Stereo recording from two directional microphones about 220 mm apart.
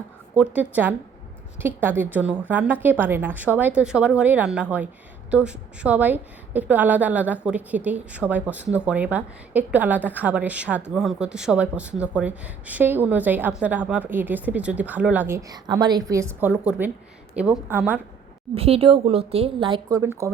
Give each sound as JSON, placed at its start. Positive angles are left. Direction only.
{"t": 0.3, "sound": "a woman's voice", "side_deg": -5}
{"t": 18.5, "sound": "a woman's voice", "side_deg": -25}